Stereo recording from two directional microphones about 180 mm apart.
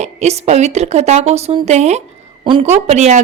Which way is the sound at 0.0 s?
40° right (ahead or behind).